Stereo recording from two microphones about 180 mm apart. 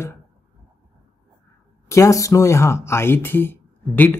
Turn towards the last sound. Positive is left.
turn(degrees=10)  # may be behind; listen again after turning